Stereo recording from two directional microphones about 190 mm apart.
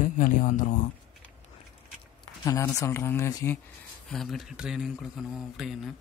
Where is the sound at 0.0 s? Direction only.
45° left (ahead or behind).